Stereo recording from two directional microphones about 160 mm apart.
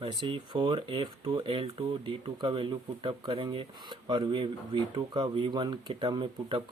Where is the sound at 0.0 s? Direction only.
30° right (ahead or behind).